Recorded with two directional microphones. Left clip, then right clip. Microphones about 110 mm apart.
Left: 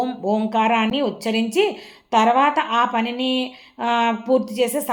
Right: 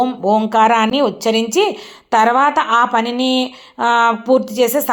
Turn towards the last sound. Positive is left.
turn(degrees=-30)  # may be behind; listen again after turning